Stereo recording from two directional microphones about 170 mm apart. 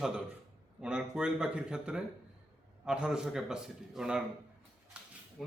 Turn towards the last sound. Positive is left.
turn(degrees=0)  # may be behind; listen again after turning